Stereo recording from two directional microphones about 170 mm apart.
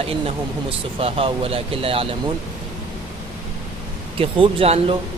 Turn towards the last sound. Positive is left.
turn(degrees=-35)  # may be behind; listen again after turning